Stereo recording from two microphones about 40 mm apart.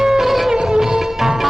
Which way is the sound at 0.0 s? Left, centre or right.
Centre.